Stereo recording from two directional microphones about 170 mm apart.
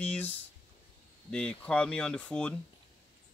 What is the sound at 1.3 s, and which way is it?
Speech, 5° left (ahead or behind).